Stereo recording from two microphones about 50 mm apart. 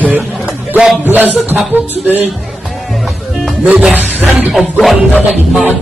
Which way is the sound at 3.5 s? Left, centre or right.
Centre.